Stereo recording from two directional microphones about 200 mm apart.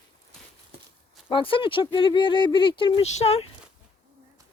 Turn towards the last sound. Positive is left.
turn(degrees=30)  # may be behind; listen again after turning